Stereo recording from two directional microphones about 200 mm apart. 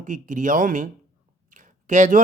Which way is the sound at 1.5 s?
40° right (ahead or behind).